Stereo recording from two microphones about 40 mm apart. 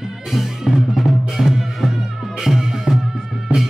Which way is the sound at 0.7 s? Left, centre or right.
Centre.